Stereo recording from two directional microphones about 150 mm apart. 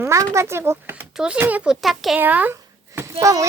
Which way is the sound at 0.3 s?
15° right (ahead or behind).